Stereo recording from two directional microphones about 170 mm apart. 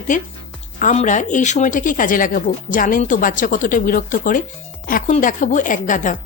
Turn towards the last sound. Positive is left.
turn(degrees=50)  # may be behind; listen again after turning